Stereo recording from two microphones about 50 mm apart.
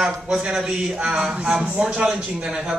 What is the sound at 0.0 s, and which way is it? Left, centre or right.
A man's voice, centre.